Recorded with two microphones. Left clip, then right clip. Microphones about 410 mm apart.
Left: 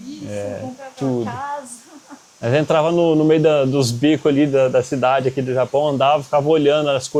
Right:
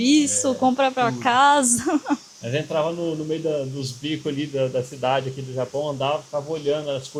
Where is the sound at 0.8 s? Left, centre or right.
Right.